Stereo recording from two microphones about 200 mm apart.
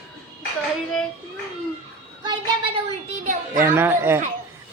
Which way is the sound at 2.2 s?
25° right (ahead or behind).